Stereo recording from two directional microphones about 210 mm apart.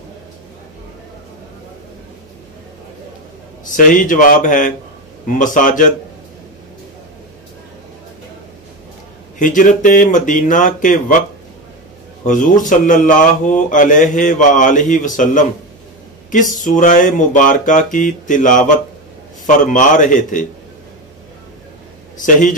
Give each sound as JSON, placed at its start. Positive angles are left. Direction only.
{"t": 3.6, "sound": "speech", "side_deg": 40}
{"t": 9.4, "sound": "speech", "side_deg": 40}
{"t": 12.3, "sound": "speech", "side_deg": 40}
{"t": 22.2, "sound": "speech", "side_deg": 40}